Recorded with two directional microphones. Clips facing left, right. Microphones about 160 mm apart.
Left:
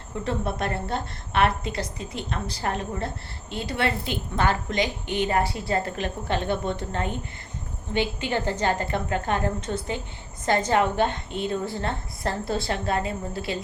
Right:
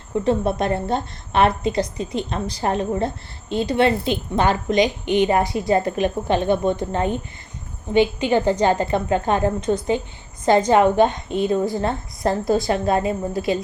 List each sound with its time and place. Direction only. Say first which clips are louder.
0.3 s a woman's voice: right 7 dB; 20° right (ahead or behind)